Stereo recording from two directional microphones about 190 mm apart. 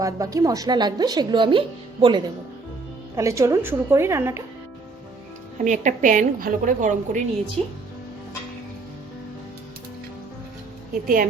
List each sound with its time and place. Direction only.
0.0 s speech: 20° right (ahead or behind)
3.2 s a woman's voice: 15° right (ahead or behind)
5.5 s a woman's voice: 40° right (ahead or behind)
11.0 s a woman's voice: 50° right (ahead or behind)